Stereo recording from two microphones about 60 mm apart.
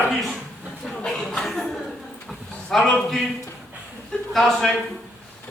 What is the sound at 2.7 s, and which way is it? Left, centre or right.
Speech, centre.